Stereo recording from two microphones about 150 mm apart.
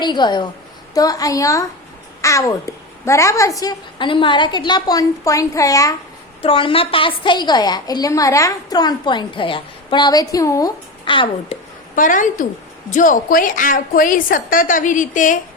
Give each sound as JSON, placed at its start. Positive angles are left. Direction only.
{"t": 0.0, "sound": "a woman's voice", "side_deg": 30}
{"t": 6.4, "sound": "a woman's voice", "side_deg": 35}
{"t": 11.0, "sound": "a child's voice", "side_deg": 35}
{"t": 11.9, "sound": "a woman's voice", "side_deg": 60}